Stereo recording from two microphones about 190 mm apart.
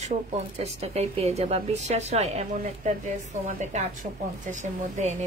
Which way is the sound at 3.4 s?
40° right (ahead or behind).